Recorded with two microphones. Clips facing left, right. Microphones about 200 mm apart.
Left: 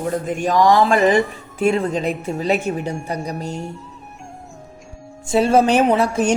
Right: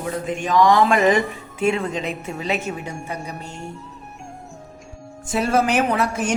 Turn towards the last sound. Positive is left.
turn(degrees=25)  # may be behind; listen again after turning